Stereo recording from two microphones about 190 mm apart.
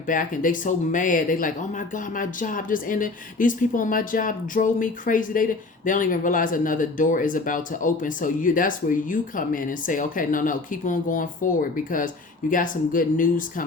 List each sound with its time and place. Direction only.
0.1 s speech: 45° left (ahead or behind)